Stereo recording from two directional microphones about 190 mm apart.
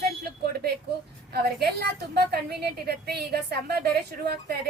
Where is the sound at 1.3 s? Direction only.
55° right (ahead or behind).